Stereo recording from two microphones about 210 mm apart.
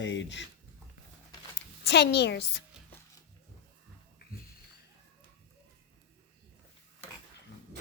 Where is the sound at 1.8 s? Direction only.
50° left (ahead or behind).